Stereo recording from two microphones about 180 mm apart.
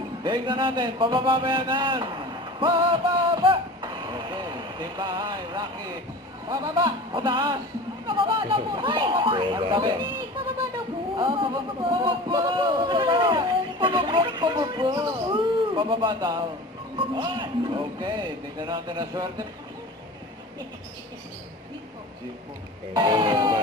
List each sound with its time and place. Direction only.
0.2 s speech: 25° right (ahead or behind)
23.0 s speech: 25° right (ahead or behind)